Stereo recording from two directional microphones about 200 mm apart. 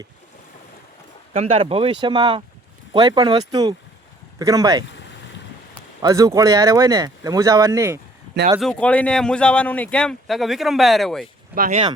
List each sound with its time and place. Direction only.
1.3 s speech: 30° right (ahead or behind)
6.0 s speech: 15° right (ahead or behind)
8.5 s speech: 5° left (ahead or behind)
11.5 s speech: 40° right (ahead or behind)